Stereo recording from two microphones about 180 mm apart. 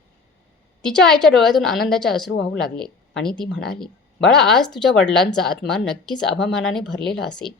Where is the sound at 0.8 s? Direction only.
5° left (ahead or behind).